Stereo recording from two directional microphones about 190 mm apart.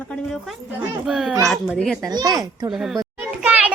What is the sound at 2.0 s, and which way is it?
Speech, 20° right (ahead or behind).